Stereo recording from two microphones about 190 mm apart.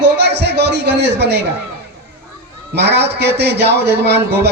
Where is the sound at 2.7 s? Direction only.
60° right (ahead or behind).